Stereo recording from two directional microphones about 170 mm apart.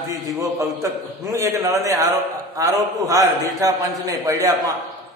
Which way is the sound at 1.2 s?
20° right (ahead or behind).